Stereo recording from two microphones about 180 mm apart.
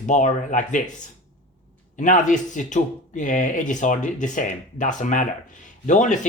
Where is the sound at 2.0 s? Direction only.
45° left (ahead or behind).